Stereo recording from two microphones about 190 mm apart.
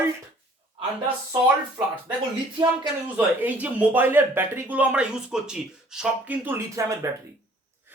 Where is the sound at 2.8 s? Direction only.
10° right (ahead or behind).